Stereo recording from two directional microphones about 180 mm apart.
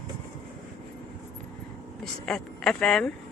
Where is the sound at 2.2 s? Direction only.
5° left (ahead or behind).